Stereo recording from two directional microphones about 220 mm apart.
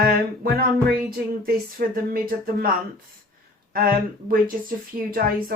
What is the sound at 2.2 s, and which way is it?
Speech, 40° right (ahead or behind).